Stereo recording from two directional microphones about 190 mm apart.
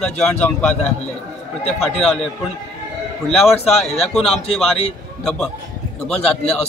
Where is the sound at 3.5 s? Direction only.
35° left (ahead or behind).